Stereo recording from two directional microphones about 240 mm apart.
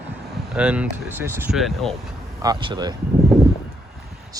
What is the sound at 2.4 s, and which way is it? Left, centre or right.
Speech, centre.